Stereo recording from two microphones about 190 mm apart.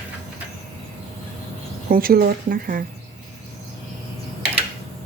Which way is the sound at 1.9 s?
50° right (ahead or behind).